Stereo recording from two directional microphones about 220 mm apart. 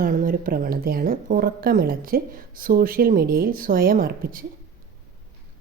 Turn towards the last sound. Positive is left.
turn(degrees=-40)  # may be behind; listen again after turning